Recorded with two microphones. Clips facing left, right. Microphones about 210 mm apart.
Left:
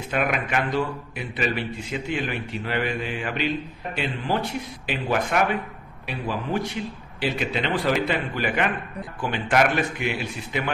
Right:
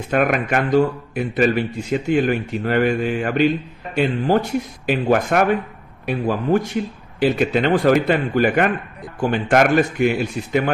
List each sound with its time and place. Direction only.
0.1 s a man's voice: 45° right (ahead or behind)